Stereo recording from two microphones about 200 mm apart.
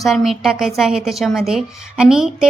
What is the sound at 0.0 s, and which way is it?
A woman's voice, centre (ahead or behind).